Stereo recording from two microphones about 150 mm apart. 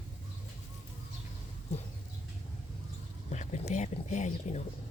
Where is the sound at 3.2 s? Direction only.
50° left (ahead or behind).